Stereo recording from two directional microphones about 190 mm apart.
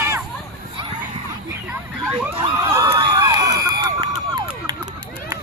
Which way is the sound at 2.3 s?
15° right (ahead or behind).